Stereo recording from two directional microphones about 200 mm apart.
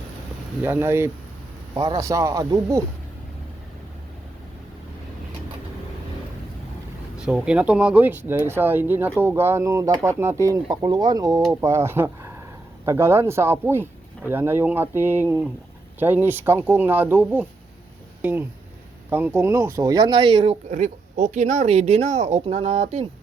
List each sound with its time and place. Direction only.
0.6 s speech: 10° right (ahead or behind)
7.2 s speech: 5° right (ahead or behind); by 23.0 s 30° right (ahead or behind)